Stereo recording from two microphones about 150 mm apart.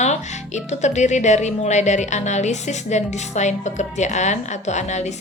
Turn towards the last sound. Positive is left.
turn(degrees=50)  # may be behind; listen again after turning